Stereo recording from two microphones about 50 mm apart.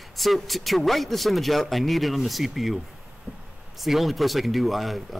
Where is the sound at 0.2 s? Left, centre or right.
Centre.